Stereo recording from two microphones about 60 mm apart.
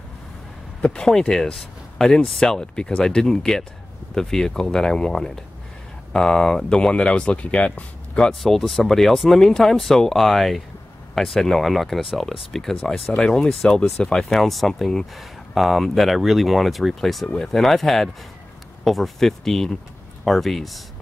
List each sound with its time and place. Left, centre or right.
0.8 s speech: centre
8.4 s speech: centre
14.3 s speech: centre
15.1 s speech: centre